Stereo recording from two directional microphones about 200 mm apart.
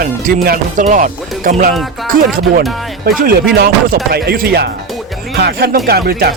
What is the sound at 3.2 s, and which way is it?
Speech, 50° right (ahead or behind).